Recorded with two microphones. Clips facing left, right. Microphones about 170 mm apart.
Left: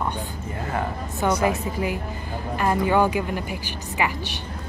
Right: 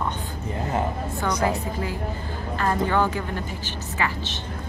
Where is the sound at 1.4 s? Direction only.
15° left (ahead or behind).